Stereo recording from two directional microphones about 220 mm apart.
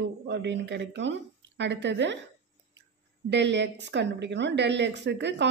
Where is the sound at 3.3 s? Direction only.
50° right (ahead or behind).